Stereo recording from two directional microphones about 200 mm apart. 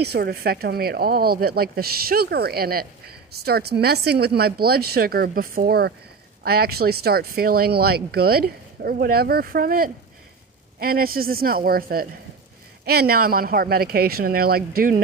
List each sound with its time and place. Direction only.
0.0 s speech: 50° right (ahead or behind)